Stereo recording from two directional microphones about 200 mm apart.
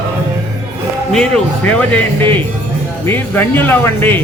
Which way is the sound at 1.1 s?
5° left (ahead or behind).